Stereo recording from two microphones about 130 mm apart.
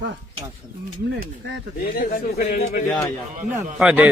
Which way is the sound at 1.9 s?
90° left.